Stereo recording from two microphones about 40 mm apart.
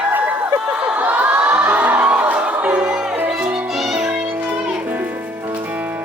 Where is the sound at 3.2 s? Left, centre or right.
Centre.